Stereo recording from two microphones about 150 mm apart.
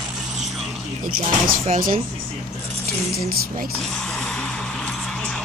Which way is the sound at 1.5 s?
70° right (ahead or behind).